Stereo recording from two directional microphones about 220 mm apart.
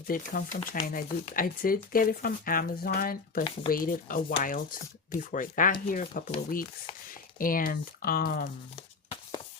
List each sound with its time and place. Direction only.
0.1 s speech: 40° left (ahead or behind)